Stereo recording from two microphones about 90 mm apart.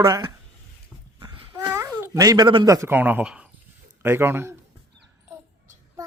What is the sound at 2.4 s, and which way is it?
Speech, 60° right (ahead or behind).